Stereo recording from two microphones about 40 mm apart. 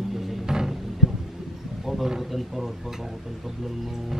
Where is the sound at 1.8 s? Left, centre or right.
Centre.